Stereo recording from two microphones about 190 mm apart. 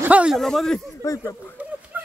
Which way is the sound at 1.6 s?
5° right (ahead or behind).